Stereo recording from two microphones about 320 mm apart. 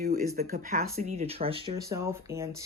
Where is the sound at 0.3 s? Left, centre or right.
Right.